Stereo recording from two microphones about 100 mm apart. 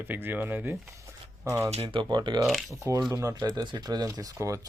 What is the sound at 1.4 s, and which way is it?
Speech, 30° right (ahead or behind).